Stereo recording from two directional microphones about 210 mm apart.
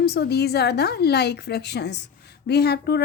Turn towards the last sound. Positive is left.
turn(degrees=50)  # may be behind; listen again after turning